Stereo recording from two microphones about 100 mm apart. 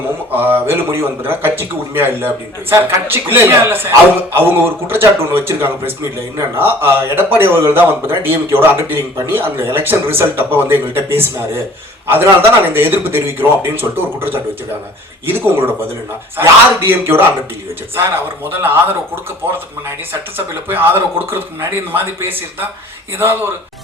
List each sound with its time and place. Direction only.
0.3 s a man's voice: 20° right (ahead or behind)
18.6 s a man's voice: 20° right (ahead or behind)
20.3 s a man's voice: 20° right (ahead or behind)